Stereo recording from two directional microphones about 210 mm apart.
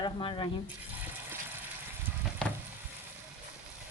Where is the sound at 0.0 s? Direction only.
20° left (ahead or behind).